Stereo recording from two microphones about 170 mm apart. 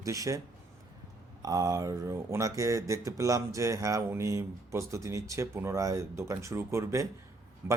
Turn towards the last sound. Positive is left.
turn(degrees=-15)  # may be behind; listen again after turning